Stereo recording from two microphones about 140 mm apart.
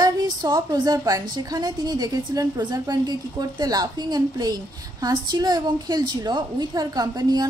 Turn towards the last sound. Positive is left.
turn(degrees=-30)  # may be behind; listen again after turning